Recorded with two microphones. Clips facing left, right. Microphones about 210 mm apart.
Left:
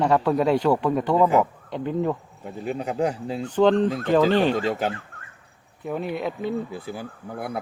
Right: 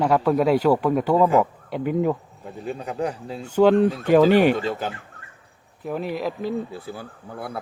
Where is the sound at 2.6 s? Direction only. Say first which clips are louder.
Left 2 dB; 20° left (ahead or behind).